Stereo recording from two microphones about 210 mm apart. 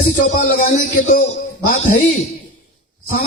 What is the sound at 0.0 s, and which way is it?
A man's voice, 35° left (ahead or behind).